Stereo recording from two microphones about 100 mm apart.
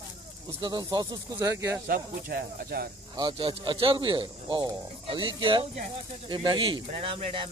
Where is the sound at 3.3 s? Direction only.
55° right (ahead or behind).